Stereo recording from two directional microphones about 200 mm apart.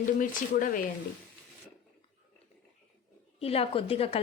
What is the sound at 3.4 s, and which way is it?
Speech, 30° left (ahead or behind).